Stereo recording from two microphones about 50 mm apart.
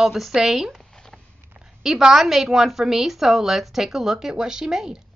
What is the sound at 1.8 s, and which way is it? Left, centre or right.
A woman's voice, centre.